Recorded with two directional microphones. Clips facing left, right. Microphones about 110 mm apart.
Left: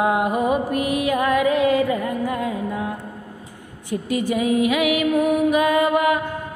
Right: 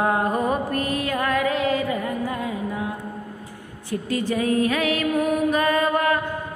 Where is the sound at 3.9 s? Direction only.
15° left (ahead or behind).